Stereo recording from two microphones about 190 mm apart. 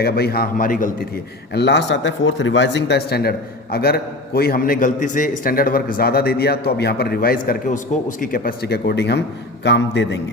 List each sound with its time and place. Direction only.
0.0 s a man's voice: 55° left (ahead or behind)